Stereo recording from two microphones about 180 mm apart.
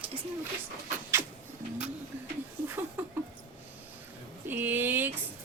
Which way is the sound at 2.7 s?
10° right (ahead or behind).